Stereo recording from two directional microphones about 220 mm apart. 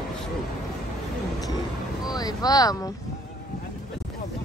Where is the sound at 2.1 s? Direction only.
15° left (ahead or behind).